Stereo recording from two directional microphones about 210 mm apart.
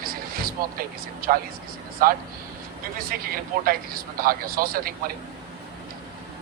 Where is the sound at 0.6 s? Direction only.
45° right (ahead or behind).